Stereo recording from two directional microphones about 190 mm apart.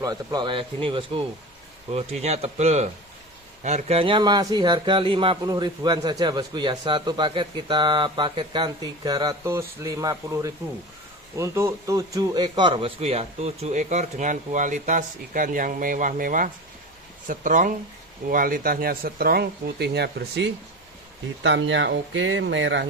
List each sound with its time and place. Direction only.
0.0 s a man's voice: 20° right (ahead or behind); by 20.5 s 60° right (ahead or behind)
21.4 s speech: 75° right (ahead or behind)